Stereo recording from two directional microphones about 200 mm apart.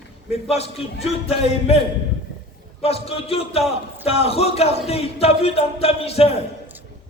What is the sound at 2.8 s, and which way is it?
A man's voice, 30° left (ahead or behind).